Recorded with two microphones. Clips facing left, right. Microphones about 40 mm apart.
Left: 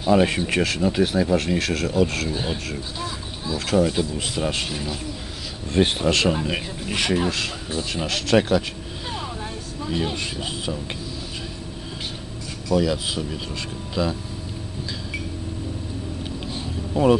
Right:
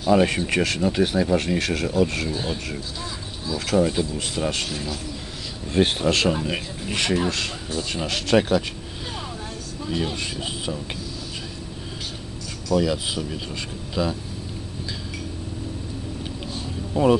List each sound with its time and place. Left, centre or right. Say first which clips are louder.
0.1 s speech: even; centre
2.3 s speech: left 1 dB; centre
3.0 s a sound: left 2 dB; centre
3.7 s speech: even; centre
5.7 s speech: even; centre
9.0 s vehicle: left 3 dB; centre
12.7 s speech: even; centre
16.9 s speech: left 1 dB; centre